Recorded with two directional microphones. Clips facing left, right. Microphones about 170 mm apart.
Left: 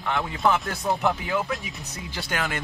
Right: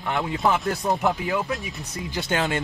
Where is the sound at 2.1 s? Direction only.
25° right (ahead or behind).